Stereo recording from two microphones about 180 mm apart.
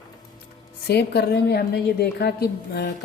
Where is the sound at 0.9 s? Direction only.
65° left (ahead or behind).